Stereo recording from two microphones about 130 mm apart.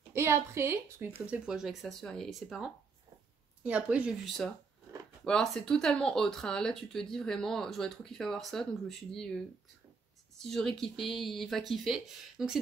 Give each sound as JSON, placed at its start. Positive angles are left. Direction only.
{"t": 0.1, "sound": "a woman's voice", "side_deg": -20}
{"t": 1.2, "sound": "speech", "side_deg": -10}
{"t": 10.4, "sound": "speech", "side_deg": 5}